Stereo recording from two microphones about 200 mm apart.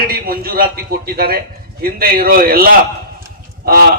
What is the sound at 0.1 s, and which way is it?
A man's voice, 45° right (ahead or behind).